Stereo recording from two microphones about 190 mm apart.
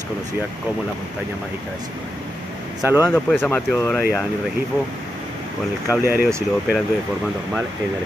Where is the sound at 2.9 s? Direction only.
10° right (ahead or behind).